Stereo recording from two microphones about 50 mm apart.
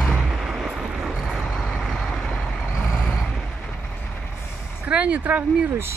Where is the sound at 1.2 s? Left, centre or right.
Centre.